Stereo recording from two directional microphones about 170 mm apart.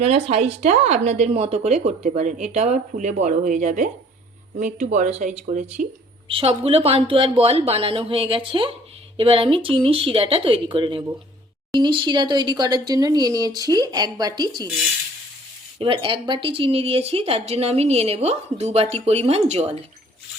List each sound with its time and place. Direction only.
0.0 s speech: 40° right (ahead or behind)
6.2 s speech: 35° right (ahead or behind)
15.8 s speech: 30° right (ahead or behind)